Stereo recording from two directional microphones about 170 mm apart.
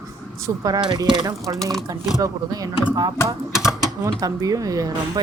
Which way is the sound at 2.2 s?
20° right (ahead or behind).